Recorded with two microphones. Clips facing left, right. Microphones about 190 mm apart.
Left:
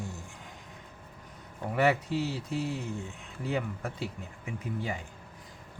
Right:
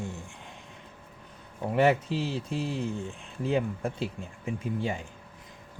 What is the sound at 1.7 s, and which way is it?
Speech, 25° right (ahead or behind).